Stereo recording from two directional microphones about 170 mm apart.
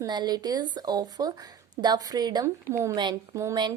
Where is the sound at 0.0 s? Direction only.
25° right (ahead or behind).